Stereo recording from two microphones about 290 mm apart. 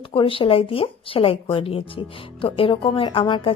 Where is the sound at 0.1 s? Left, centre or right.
Centre.